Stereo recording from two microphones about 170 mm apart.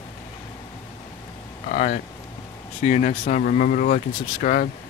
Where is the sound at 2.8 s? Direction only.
45° left (ahead or behind).